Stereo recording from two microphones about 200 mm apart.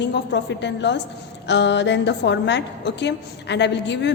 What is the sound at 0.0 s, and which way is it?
A woman's voice, 60° left (ahead or behind).